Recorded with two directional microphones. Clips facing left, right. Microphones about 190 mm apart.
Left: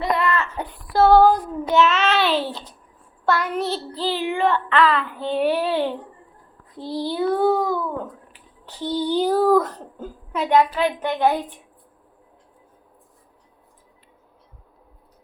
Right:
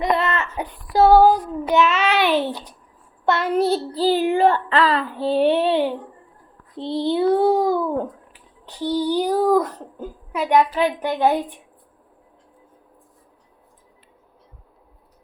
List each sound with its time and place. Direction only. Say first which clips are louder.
0.0 s a sound: right 1 dB; 20° right (ahead or behind)
0.5 s child singing: right 2 dB; 15° right (ahead or behind)
3.2 s child singing: right 4 dB; 25° right (ahead or behind)
8.6 s a child's voice: right 2 dB; 15° right (ahead or behind)